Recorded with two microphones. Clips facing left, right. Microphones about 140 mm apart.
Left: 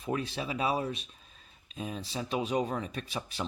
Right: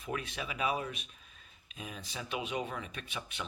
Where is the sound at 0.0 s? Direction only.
30° left (ahead or behind).